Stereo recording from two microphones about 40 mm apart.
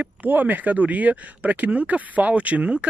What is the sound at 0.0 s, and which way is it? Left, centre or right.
Speech, right.